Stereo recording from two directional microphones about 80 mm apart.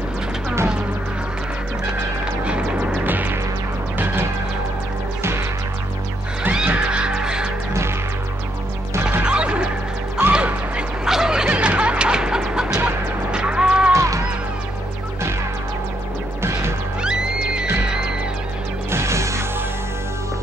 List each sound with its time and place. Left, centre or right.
2.4 s music: centre
6.5 s music: centre
9.2 s music: centre
13.9 s music: right
17.0 s music: centre
18.9 s music: right